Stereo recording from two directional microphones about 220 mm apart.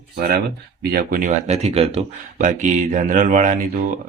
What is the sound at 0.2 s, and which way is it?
Speech, 45° right (ahead or behind).